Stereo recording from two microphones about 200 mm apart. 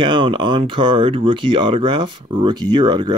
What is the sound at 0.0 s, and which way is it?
Speech, 25° right (ahead or behind).